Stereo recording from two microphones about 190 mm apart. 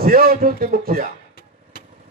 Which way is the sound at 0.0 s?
50° right (ahead or behind).